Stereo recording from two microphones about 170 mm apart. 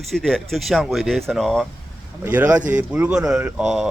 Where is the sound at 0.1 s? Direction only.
Centre (ahead or behind).